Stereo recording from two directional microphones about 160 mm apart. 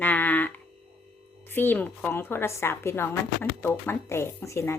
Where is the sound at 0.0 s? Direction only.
10° left (ahead or behind).